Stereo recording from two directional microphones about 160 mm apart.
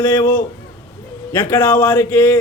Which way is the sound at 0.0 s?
15° left (ahead or behind).